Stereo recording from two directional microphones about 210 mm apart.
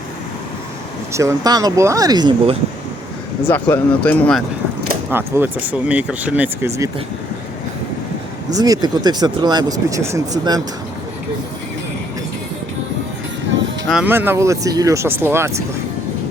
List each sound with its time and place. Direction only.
1.1 s speech: 15° right (ahead or behind)
3.4 s speech: 10° left (ahead or behind)
5.1 s speech: 10° right (ahead or behind)
8.4 s speech: 15° right (ahead or behind)
13.8 s speech: 5° right (ahead or behind)